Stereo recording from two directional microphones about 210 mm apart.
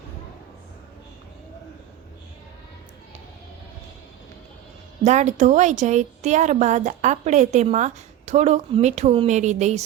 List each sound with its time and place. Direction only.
5.0 s a woman's voice: 35° right (ahead or behind)